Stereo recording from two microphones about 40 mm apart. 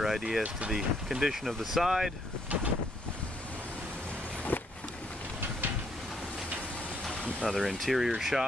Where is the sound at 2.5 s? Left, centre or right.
Right.